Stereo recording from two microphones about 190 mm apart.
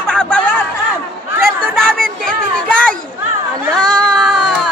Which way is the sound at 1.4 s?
5° left (ahead or behind).